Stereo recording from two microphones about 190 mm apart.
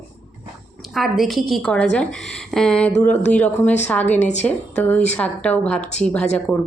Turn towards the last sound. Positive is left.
turn(degrees=5)  # may be behind; listen again after turning